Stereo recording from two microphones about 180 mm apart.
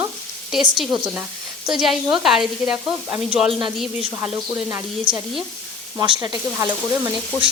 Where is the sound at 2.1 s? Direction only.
Centre (ahead or behind).